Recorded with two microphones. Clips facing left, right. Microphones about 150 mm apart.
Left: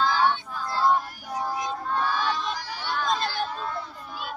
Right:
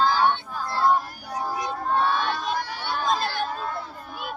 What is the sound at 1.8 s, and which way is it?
Crowd, 50° right (ahead or behind).